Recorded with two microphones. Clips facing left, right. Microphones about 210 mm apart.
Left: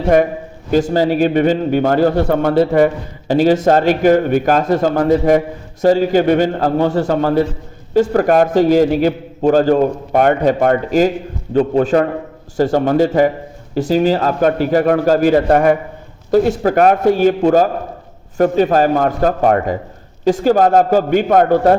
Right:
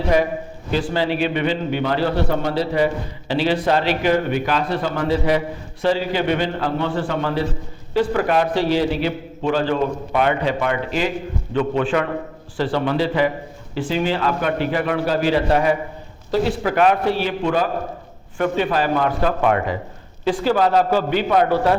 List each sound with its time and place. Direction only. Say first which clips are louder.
0.7 s a man's voice: left 7 dB; 45° left (ahead or behind)